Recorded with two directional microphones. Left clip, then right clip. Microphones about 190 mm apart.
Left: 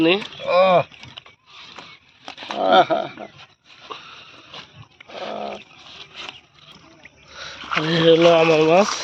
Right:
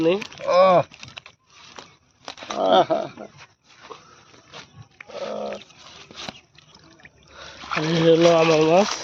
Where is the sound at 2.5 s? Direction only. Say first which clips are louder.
Left 2 dB; 15° right (ahead or behind).